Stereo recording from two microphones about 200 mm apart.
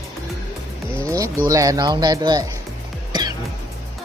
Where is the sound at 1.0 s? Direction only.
15° right (ahead or behind).